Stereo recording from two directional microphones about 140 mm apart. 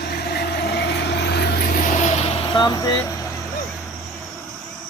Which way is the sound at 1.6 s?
80° left.